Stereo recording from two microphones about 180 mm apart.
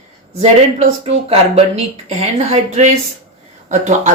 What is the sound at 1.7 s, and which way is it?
Speech, 35° right (ahead or behind).